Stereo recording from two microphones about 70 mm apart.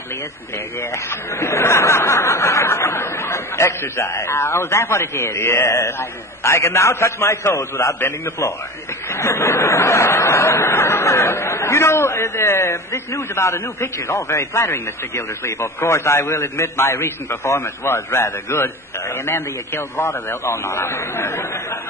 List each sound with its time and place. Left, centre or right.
0.8 s speech: left